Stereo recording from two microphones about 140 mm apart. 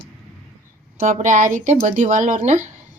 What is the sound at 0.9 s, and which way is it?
Speech, 60° right (ahead or behind).